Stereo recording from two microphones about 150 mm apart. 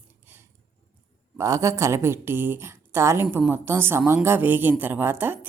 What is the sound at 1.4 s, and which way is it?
A woman's voice, 20° right (ahead or behind).